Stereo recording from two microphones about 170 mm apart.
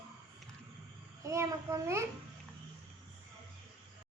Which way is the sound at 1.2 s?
15° right (ahead or behind).